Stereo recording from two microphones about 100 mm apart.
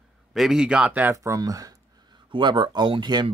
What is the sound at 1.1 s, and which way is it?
Speech, 30° right (ahead or behind).